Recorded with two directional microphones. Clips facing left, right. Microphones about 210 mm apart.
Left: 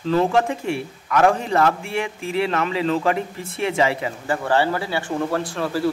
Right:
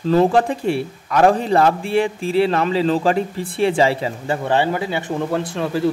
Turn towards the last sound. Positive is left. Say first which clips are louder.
# right 2 dB
turn(degrees=-20)  # may be behind; listen again after turning